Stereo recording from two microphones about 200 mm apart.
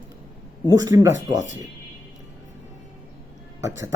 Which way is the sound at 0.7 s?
20° right (ahead or behind).